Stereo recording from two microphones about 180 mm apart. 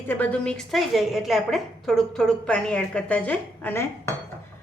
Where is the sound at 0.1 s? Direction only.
10° left (ahead or behind).